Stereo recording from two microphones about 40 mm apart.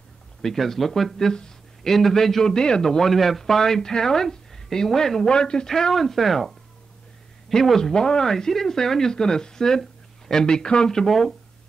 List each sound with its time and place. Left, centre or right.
0.4 s speech: centre
1.1 s speech: centre
1.9 s speech: centre
7.5 s speech: centre